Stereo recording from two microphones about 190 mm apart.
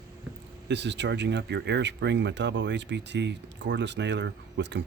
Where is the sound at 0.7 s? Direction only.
65° right (ahead or behind).